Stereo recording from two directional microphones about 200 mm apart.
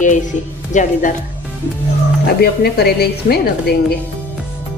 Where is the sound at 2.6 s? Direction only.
50° left (ahead or behind).